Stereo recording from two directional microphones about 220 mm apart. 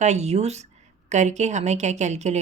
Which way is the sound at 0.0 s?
30° right (ahead or behind).